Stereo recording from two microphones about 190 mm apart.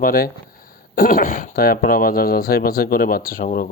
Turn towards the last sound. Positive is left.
turn(degrees=45)  # may be behind; listen again after turning